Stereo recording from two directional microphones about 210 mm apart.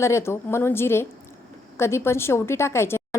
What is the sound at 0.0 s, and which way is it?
A woman's voice, 10° left (ahead or behind).